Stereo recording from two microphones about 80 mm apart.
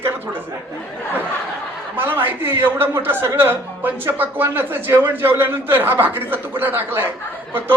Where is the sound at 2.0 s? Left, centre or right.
Right.